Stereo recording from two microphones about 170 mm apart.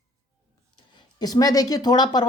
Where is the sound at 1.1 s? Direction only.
20° left (ahead or behind).